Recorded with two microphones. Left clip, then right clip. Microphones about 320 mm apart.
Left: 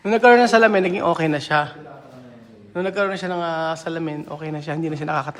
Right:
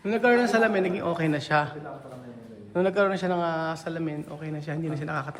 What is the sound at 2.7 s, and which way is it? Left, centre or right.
A man's voice, centre.